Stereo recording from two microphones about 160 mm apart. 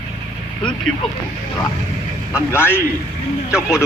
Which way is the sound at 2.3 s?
15° left (ahead or behind).